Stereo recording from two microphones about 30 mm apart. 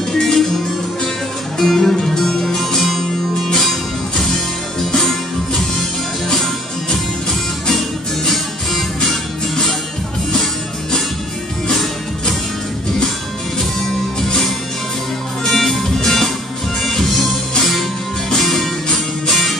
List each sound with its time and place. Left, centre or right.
0.1 s music: centre
1.6 s music: centre
4.7 s music: centre
13.8 s music: centre
15.5 s music: centre
16.8 s music: centre